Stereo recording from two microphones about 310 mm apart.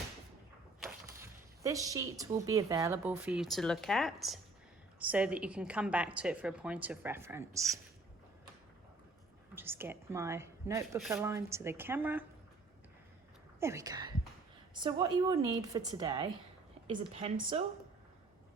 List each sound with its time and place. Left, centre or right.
0.8 s a woman's voice: centre
9.6 s a woman's voice: centre
13.6 s a woman's voice: centre